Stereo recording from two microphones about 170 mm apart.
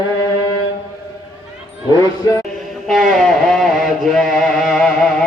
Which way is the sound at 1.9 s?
20° left (ahead or behind).